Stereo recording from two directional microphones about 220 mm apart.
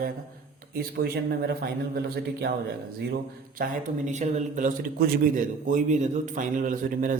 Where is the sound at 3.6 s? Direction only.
35° right (ahead or behind).